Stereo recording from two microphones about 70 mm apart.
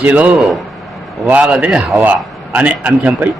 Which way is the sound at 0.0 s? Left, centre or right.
Centre.